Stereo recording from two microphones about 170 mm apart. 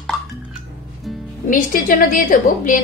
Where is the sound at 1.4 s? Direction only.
55° left (ahead or behind).